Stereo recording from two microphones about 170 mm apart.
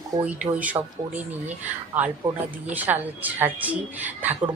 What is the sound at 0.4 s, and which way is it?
A woman's voice, 10° right (ahead or behind).